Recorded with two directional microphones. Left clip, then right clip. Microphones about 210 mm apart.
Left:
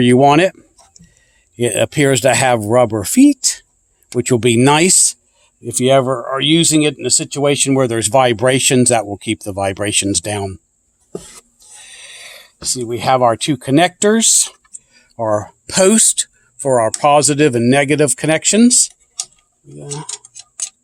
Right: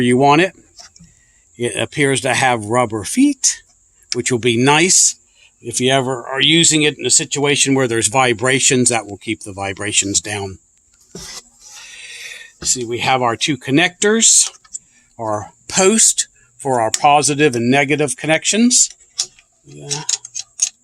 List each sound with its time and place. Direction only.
0.0 s speech: 50° left (ahead or behind)
1.5 s speech: 50° left (ahead or behind)
11.9 s speech: 55° left (ahead or behind)